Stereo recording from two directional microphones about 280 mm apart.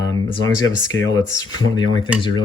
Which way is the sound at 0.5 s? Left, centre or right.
Left.